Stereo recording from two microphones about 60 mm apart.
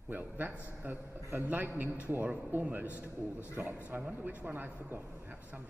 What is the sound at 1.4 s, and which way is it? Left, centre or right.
A man's voice, right.